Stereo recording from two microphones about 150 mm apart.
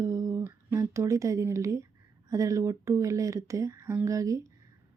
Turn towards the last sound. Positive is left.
turn(degrees=-20)  # may be behind; listen again after turning